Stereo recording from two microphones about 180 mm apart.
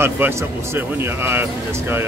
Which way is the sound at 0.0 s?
10° right (ahead or behind).